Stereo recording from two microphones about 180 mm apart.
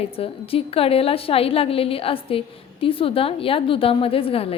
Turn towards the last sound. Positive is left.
turn(degrees=30)  # may be behind; listen again after turning